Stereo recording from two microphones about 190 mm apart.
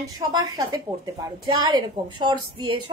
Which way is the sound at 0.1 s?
20° right (ahead or behind).